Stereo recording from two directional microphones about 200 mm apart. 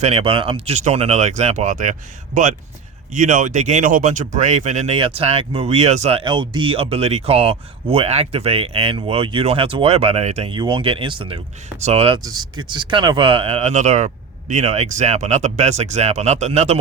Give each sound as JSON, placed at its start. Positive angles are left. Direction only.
{"t": 0.0, "sound": "speech", "side_deg": -25}